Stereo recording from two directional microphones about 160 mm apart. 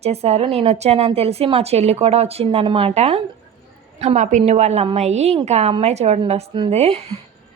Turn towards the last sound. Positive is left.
turn(degrees=-40)  # may be behind; listen again after turning